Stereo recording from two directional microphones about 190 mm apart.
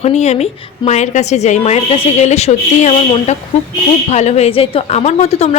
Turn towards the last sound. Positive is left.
turn(degrees=35)  # may be behind; listen again after turning